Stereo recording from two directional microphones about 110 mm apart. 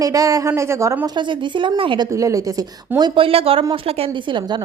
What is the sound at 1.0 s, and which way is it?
A woman's voice, 45° right (ahead or behind).